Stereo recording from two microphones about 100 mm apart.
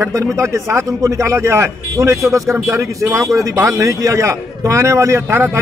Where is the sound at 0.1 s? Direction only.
30° right (ahead or behind).